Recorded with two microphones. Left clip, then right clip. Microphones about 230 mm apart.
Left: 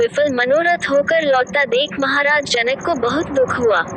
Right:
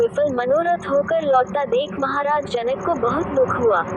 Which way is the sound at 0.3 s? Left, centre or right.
Left.